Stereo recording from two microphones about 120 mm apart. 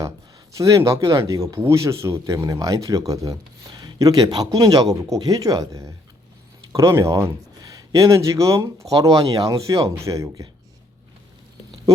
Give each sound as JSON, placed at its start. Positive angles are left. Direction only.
{"t": 0.5, "sound": "a man's voice", "side_deg": -25}